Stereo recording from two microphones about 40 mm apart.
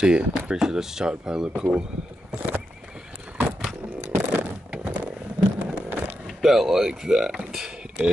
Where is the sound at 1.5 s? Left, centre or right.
Right.